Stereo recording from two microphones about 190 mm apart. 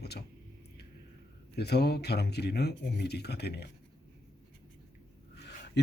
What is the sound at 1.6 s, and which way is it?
Speech, 60° left (ahead or behind).